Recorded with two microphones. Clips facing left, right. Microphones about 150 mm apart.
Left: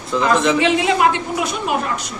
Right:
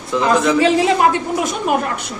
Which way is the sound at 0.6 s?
40° right (ahead or behind).